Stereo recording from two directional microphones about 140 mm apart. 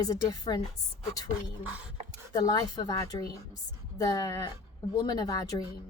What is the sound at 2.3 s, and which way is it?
A woman's voice, 25° left (ahead or behind).